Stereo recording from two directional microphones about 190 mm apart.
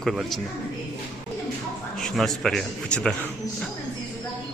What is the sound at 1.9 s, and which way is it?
Speech, centre (ahead or behind).